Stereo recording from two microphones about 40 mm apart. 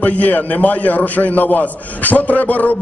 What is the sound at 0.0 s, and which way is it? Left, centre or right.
A man's voice, left.